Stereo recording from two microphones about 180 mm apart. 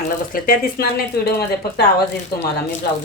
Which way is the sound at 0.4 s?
55° left (ahead or behind).